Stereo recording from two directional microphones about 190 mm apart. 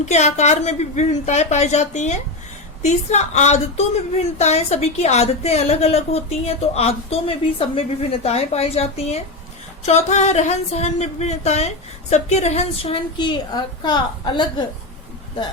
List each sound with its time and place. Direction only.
0.0 s a woman's voice: 35° left (ahead or behind)